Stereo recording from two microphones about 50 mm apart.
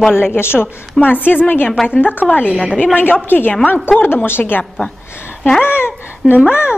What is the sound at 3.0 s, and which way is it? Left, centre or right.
A woman's voice, left.